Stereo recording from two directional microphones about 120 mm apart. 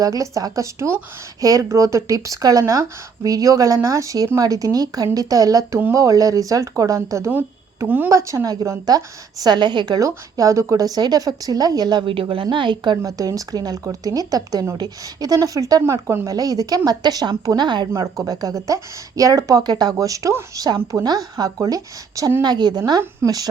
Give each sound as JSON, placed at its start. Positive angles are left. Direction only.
{"t": 0.0, "sound": "speech", "side_deg": -30}
{"t": 7.3, "sound": "speech", "side_deg": -15}
{"t": 8.1, "sound": "speech", "side_deg": -25}
{"t": 13.0, "sound": "speech", "side_deg": -30}